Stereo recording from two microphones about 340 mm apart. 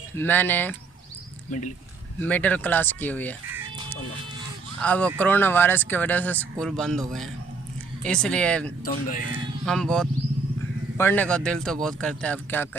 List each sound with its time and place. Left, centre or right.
0.2 s speech: centre
1.5 s speech: left
2.2 s speech: centre
4.8 s speech: centre
8.8 s speech: left
9.6 s speech: centre